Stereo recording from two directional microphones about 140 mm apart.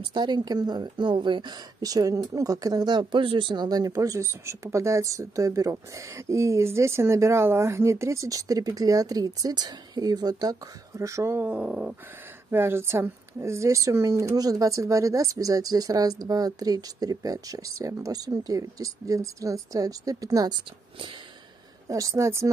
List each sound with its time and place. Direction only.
0.0 s a woman's voice: 30° right (ahead or behind)
21.8 s a woman's voice: 25° right (ahead or behind)